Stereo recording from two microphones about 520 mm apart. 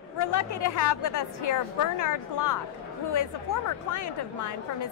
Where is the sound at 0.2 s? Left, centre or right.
Left.